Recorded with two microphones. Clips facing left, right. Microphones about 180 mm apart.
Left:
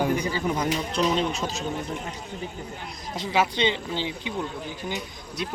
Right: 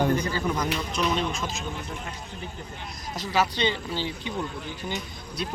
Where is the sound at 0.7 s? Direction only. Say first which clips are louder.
Left 3 dB; 35° left (ahead or behind).